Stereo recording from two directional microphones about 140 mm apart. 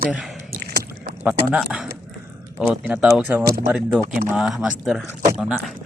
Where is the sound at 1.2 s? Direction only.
5° right (ahead or behind).